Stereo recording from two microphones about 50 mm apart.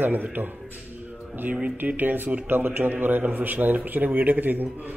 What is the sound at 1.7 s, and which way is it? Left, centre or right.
Speech, right.